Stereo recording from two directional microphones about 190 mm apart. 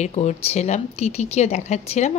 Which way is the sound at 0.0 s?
35° left (ahead or behind).